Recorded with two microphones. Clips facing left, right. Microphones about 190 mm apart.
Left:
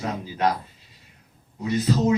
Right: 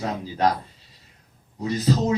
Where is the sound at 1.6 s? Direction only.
35° right (ahead or behind).